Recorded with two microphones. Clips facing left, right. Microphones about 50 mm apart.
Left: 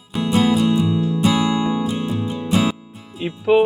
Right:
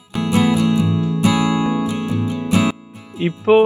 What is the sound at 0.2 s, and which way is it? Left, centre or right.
Music, right.